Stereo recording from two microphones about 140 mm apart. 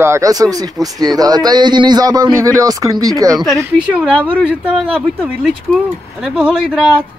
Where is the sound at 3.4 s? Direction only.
5° right (ahead or behind).